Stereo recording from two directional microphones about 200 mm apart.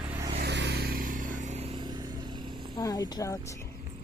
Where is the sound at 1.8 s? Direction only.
20° right (ahead or behind).